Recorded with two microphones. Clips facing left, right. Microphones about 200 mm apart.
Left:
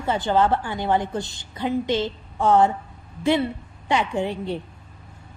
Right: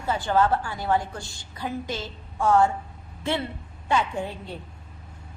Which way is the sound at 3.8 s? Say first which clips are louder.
Left 3 dB; 15° left (ahead or behind).